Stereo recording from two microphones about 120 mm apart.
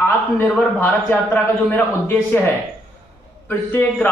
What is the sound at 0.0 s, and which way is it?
A man's voice, 20° left (ahead or behind).